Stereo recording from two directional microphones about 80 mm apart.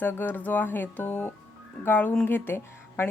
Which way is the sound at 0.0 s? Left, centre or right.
Left.